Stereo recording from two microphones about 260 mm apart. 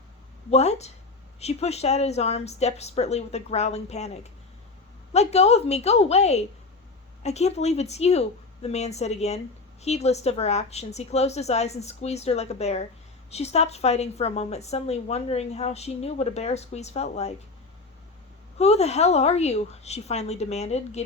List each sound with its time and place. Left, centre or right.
0.5 s a woman's voice: left
18.6 s a woman's voice: left